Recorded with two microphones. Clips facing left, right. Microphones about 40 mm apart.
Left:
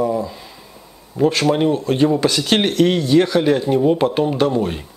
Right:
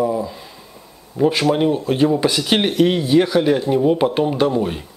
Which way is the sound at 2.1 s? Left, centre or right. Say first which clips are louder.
Left 1 dB; centre.